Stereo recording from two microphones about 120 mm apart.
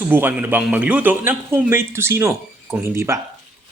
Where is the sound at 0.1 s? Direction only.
15° right (ahead or behind).